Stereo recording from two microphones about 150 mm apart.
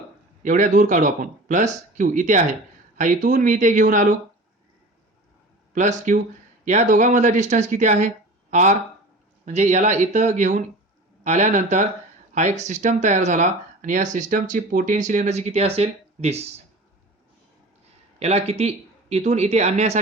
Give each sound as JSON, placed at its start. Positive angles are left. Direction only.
{"t": 0.4, "sound": "speech", "side_deg": -55}
{"t": 5.7, "sound": "speech", "side_deg": -55}
{"t": 18.2, "sound": "speech", "side_deg": -45}